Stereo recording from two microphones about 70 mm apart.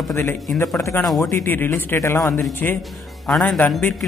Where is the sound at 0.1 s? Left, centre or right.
Left.